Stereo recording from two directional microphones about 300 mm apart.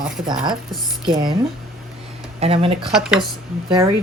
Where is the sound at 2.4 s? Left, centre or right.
Centre.